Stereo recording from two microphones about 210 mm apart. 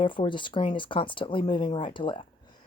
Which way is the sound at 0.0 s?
25° left (ahead or behind).